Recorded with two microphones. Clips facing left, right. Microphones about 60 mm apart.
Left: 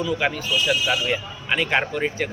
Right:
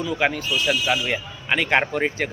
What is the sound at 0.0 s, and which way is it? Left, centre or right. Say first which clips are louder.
Speech: right 1 dB; right.